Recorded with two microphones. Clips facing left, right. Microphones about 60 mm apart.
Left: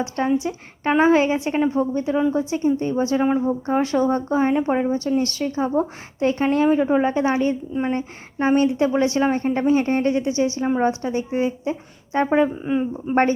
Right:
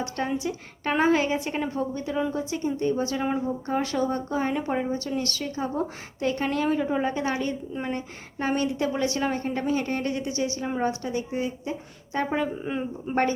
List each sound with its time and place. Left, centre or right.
0.3 s a woman's voice: left
12.6 s a woman's voice: centre